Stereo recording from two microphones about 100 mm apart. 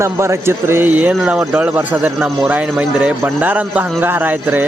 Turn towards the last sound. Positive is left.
turn(degrees=-20)  # may be behind; listen again after turning